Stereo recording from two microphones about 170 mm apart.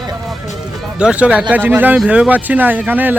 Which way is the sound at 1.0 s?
5° right (ahead or behind).